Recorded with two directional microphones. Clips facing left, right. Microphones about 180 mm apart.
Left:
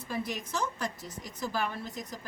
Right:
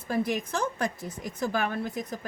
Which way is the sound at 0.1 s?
55° right (ahead or behind).